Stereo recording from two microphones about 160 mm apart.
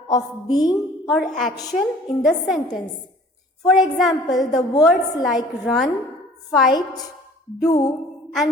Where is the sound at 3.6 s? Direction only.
Centre (ahead or behind).